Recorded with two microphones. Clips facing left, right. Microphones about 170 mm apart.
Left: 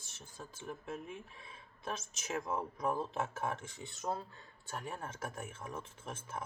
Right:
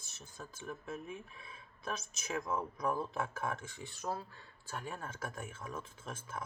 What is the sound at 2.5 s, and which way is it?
Speech, 25° left (ahead or behind).